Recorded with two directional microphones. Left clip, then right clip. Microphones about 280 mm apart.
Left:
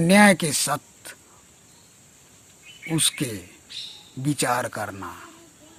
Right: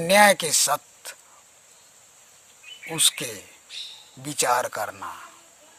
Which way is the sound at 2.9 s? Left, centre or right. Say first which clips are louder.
Right 1 dB; centre.